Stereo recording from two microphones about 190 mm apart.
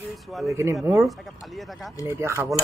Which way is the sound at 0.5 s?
15° right (ahead or behind).